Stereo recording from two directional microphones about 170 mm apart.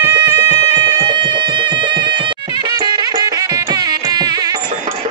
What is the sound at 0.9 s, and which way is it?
Music, 25° right (ahead or behind).